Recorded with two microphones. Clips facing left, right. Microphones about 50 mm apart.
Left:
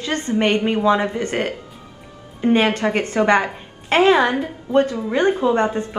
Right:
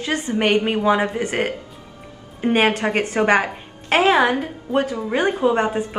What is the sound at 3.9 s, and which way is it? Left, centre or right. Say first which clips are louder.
A woman's voice: left 1 dB; centre.